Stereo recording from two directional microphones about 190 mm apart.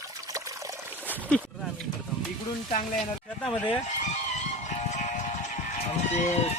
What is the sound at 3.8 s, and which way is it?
Music, 40° left (ahead or behind).